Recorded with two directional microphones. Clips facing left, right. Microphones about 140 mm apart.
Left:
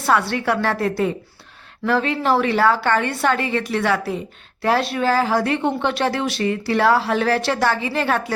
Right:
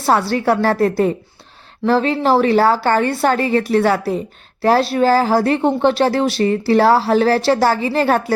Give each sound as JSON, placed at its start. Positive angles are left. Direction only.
{"t": 0.0, "sound": "speech", "side_deg": -30}